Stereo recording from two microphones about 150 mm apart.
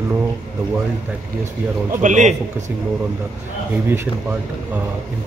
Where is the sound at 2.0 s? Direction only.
55° right (ahead or behind).